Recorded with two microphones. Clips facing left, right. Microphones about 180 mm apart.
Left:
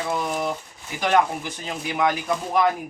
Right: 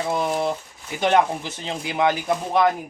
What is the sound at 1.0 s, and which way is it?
Speech, 25° right (ahead or behind).